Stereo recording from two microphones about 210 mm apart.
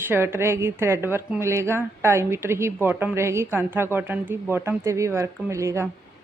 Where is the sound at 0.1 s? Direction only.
10° right (ahead or behind).